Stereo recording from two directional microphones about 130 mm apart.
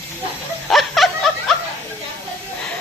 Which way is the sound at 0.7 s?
Centre (ahead or behind).